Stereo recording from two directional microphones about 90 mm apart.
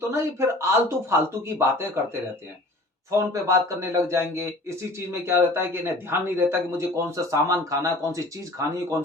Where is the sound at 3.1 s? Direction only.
35° right (ahead or behind).